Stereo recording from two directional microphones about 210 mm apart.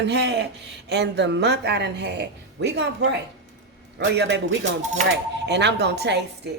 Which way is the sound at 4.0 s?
55° right (ahead or behind).